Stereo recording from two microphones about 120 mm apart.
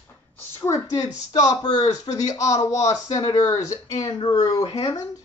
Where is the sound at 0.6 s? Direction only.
25° left (ahead or behind).